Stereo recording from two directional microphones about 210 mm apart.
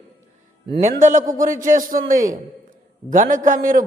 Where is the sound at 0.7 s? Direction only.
35° right (ahead or behind).